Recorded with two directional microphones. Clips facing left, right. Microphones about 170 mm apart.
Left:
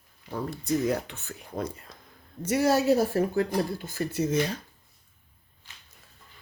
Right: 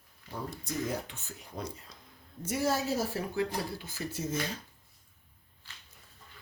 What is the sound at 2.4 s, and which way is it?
Speech, 75° left (ahead or behind).